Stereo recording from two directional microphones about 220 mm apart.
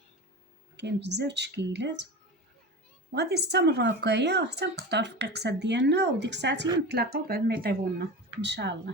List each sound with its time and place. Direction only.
0.8 s speech: 50° right (ahead or behind)
3.1 s speech: 50° right (ahead or behind)